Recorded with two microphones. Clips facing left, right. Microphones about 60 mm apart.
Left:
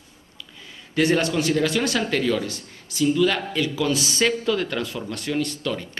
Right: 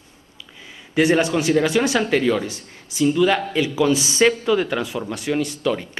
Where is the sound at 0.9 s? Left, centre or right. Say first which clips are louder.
Right 3 dB; centre.